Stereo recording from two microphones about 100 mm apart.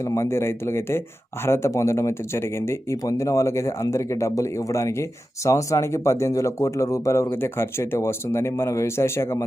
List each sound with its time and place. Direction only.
0.0 s speech: 30° left (ahead or behind)